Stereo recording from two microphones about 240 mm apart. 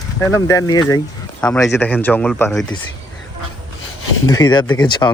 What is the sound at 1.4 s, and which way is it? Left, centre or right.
Speech, centre.